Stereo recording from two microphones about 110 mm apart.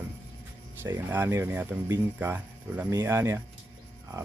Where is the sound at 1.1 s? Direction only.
20° right (ahead or behind).